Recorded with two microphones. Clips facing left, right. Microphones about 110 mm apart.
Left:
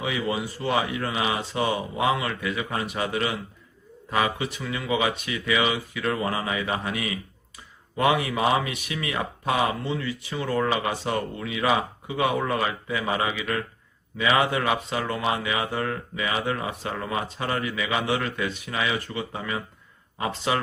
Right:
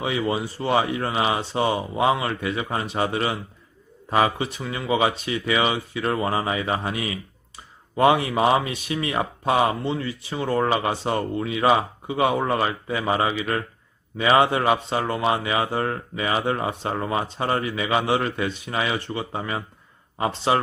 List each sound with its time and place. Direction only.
0.0 s speech: 30° right (ahead or behind)